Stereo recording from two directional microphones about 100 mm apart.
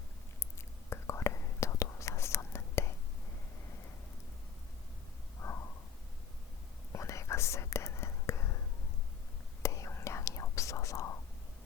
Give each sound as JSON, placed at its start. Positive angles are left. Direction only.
{"t": 0.9, "sound": "whispering", "side_deg": 30}
{"t": 5.4, "sound": "a sound", "side_deg": 30}
{"t": 6.9, "sound": "whispering", "side_deg": 30}
{"t": 9.6, "sound": "whispering", "side_deg": 30}